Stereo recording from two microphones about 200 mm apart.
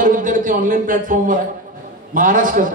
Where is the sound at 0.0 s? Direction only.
40° right (ahead or behind).